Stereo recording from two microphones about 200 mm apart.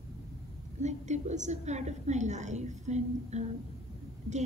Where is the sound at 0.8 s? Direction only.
35° right (ahead or behind).